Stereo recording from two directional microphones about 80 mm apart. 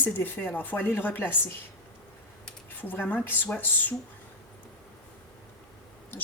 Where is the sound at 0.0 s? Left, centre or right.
Left.